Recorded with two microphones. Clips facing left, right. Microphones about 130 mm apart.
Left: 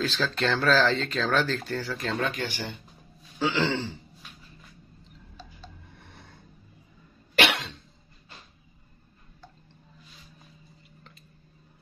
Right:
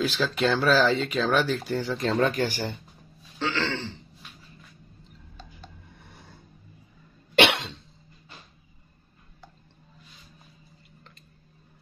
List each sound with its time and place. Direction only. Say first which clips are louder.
0.0 s speech: right 3 dB; 10° right (ahead or behind)
1.9 s speech: right 5 dB; 30° right (ahead or behind)
2.1 s speech: right 7 dB; 45° right (ahead or behind)
3.3 s throat clearing: left 3 dB; 15° left (ahead or behind)
7.3 s cough: right 4 dB; 25° right (ahead or behind)